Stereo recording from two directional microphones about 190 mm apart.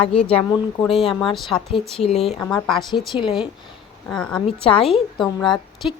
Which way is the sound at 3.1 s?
25° left (ahead or behind).